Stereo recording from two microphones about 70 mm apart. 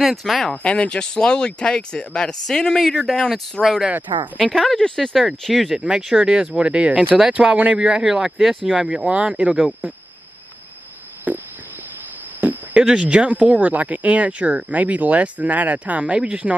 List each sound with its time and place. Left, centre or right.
0.0 s speech: centre
0.6 s speech: centre
3.6 s speech: centre
4.1 s speech: right
4.6 s speech: centre
5.8 s speech: centre
8.0 s speech: centre
11.3 s speech: right
12.4 s a sound: right
12.8 s speech: centre